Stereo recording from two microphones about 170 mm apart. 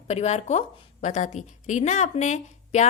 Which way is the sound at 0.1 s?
40° left (ahead or behind).